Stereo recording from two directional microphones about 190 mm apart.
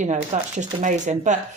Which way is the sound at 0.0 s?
40° right (ahead or behind).